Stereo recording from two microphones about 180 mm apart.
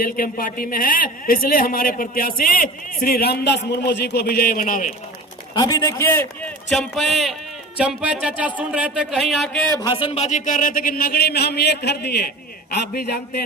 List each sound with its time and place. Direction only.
0.0 s a man's voice: 50° left (ahead or behind)
5.5 s a man's voice: 20° left (ahead or behind)
6.7 s a man's voice: centre (ahead or behind)
9.8 s a man's voice: 30° left (ahead or behind); by 13.4 s 60° left (ahead or behind)